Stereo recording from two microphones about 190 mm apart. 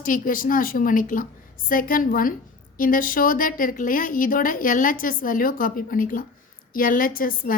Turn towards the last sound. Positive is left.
turn(degrees=50)  # may be behind; listen again after turning